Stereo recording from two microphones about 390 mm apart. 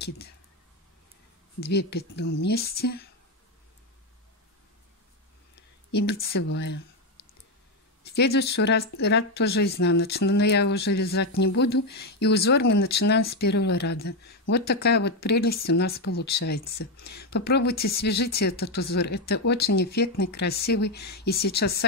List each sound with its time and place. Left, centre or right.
1.6 s speech: left
5.9 s speech: left
8.0 s speech: left